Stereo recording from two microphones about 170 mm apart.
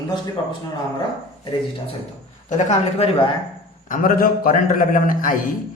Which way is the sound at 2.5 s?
45° left (ahead or behind).